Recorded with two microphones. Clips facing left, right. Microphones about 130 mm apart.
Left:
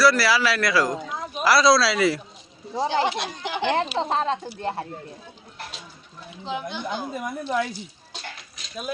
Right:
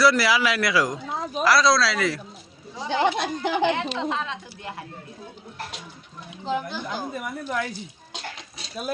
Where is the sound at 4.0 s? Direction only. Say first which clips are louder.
Left 4 dB; 35° left (ahead or behind).